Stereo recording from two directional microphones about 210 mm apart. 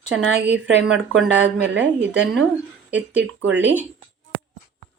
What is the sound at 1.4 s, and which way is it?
Speech, 60° right (ahead or behind).